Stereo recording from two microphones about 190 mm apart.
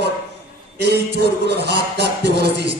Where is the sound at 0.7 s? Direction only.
60° right (ahead or behind).